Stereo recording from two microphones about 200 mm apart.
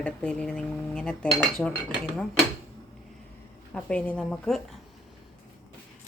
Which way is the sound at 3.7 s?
5° left (ahead or behind).